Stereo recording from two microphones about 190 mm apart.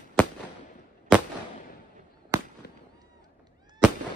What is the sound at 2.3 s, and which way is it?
Fireworks, 15° right (ahead or behind).